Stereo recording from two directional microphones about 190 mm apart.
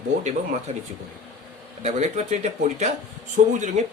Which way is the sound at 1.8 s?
40° right (ahead or behind).